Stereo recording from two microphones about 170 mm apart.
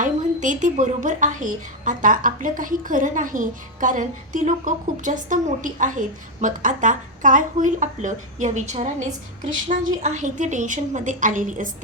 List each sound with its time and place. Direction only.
0.0 s a woman's voice: 50° right (ahead or behind)